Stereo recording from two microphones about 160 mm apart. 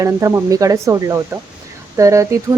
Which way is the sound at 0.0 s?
20° right (ahead or behind).